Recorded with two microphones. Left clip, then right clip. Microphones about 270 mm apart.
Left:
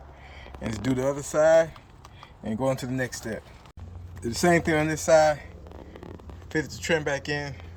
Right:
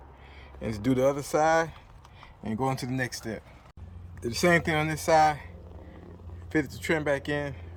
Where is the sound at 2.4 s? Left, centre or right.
Centre.